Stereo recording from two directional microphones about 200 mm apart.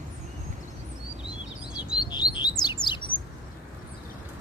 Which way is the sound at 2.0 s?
20° left (ahead or behind).